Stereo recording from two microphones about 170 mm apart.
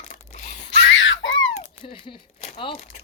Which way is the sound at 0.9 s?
90° left.